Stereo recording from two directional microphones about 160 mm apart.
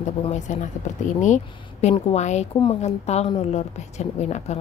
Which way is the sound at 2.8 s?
45° left (ahead or behind).